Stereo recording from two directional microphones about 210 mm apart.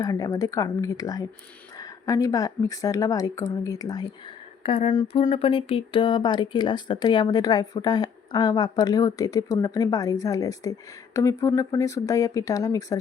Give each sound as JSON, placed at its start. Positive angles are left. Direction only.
{"t": 0.0, "sound": "a woman's voice", "side_deg": 15}
{"t": 4.6, "sound": "a sound", "side_deg": 30}
{"t": 4.9, "sound": "speech", "side_deg": 25}